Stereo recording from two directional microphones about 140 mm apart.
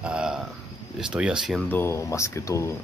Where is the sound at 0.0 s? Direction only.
5° right (ahead or behind).